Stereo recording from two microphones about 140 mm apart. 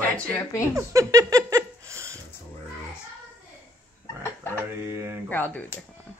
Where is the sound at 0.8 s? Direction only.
25° right (ahead or behind).